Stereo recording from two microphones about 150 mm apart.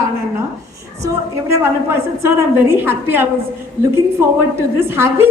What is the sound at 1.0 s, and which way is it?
A woman's voice, 20° right (ahead or behind).